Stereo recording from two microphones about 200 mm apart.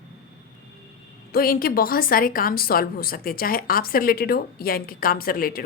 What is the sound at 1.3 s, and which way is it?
A woman's voice, 45° left (ahead or behind).